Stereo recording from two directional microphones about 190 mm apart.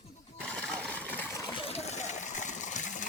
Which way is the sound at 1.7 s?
35° left (ahead or behind).